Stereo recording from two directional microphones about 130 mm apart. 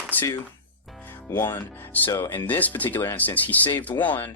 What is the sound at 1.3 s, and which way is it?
Speech, 15° left (ahead or behind).